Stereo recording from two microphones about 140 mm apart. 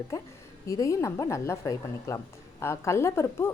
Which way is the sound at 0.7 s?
25° left (ahead or behind).